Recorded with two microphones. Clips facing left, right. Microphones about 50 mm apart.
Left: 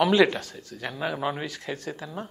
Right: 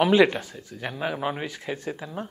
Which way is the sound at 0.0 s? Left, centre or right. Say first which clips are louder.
Right 1 dB; centre.